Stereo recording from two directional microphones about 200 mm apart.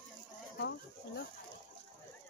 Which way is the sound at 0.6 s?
55° left (ahead or behind).